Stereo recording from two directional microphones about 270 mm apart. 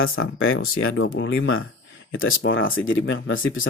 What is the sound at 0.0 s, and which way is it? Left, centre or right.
Speech, left.